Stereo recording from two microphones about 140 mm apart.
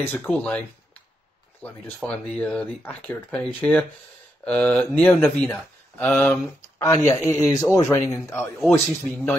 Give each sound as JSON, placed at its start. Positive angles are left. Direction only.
{"t": 0.0, "sound": "a man's voice", "side_deg": 10}